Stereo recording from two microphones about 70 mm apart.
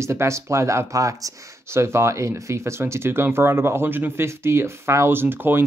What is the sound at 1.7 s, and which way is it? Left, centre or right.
Speech, right.